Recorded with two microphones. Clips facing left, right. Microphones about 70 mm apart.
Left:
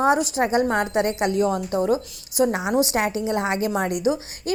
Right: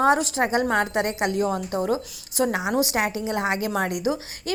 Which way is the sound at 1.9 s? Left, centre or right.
Right.